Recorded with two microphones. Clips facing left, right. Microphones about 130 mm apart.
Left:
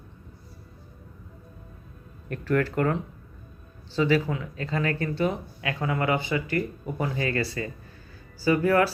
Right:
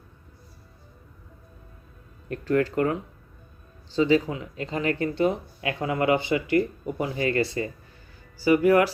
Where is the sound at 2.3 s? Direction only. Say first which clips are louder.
Right 2 dB; 25° right (ahead or behind).